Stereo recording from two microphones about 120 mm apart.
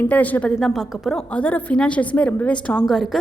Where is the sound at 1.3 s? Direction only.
10° left (ahead or behind).